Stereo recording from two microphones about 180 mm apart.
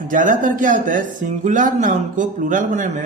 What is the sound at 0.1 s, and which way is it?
Speech, 45° right (ahead or behind).